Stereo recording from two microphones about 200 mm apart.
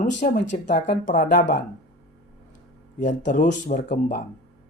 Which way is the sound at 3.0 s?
40° left (ahead or behind).